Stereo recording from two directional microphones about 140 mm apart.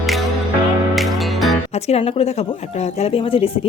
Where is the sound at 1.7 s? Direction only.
50° left (ahead or behind).